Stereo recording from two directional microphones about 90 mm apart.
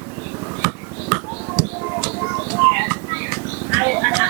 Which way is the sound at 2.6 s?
25° right (ahead or behind).